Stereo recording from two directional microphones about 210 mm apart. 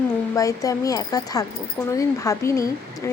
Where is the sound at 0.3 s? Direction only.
15° left (ahead or behind).